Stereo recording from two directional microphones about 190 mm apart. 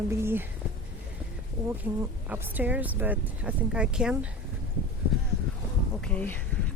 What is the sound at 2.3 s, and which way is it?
Speech, 10° right (ahead or behind).